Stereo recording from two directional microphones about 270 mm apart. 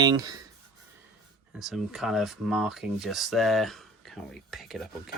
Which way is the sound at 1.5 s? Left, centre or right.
Centre.